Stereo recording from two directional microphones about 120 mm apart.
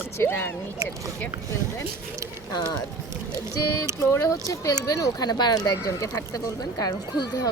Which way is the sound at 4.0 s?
25° left (ahead or behind).